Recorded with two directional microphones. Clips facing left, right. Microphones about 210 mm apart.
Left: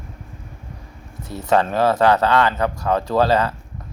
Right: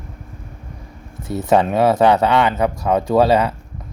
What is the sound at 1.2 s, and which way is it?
Speech, 15° right (ahead or behind).